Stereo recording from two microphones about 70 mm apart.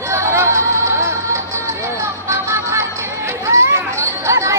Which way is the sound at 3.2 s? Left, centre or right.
Right.